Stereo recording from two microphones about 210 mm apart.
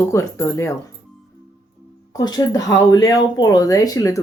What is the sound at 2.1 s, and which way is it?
Speech, 20° left (ahead or behind).